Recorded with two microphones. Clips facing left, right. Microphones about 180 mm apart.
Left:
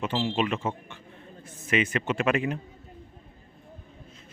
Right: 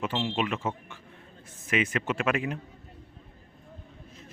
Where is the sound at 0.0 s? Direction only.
Centre (ahead or behind).